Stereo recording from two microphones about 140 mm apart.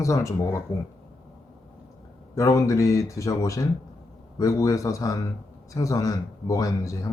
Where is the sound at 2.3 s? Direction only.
25° left (ahead or behind).